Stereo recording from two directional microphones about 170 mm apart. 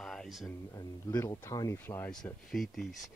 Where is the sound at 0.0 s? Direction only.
Centre (ahead or behind).